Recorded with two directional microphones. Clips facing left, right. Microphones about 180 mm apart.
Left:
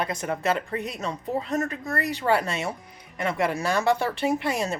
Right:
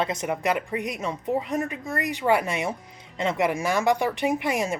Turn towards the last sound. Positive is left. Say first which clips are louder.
# right 1 dB
turn(degrees=-15)  # may be behind; listen again after turning